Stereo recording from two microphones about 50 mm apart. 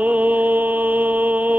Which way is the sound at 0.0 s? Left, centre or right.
Right.